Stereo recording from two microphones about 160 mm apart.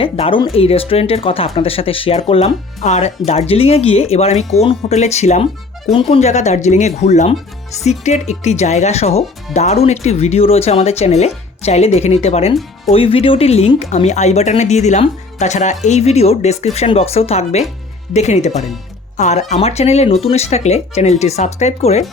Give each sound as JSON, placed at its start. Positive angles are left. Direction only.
{"t": 0.0, "sound": "speech", "side_deg": 35}
{"t": 18.5, "sound": "speech", "side_deg": 0}
{"t": 19.1, "sound": "speech", "side_deg": 45}